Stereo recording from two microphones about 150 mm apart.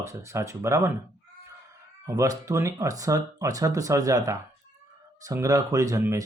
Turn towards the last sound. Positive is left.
turn(degrees=-20)  # may be behind; listen again after turning